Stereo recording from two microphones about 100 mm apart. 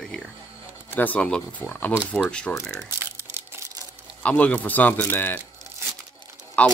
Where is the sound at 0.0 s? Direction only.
5° left (ahead or behind).